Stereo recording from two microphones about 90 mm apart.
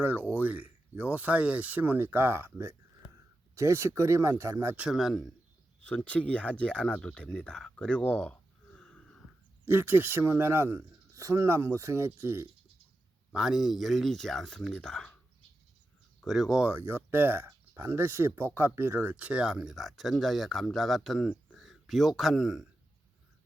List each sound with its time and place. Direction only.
0.0 s speech: 15° right (ahead or behind)
4.8 s speech: 5° right (ahead or behind)
5.8 s speech: 15° left (ahead or behind)
9.6 s speech: 25° right (ahead or behind)
13.3 s speech: 5° right (ahead or behind)
16.2 s speech: centre (ahead or behind)
16.7 s a man's voice: 25° right (ahead or behind); by 22.6 s centre (ahead or behind)